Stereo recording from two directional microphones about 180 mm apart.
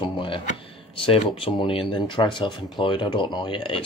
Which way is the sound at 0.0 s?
25° left (ahead or behind).